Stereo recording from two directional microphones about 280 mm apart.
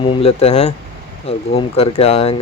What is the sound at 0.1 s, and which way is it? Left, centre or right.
Speech, centre.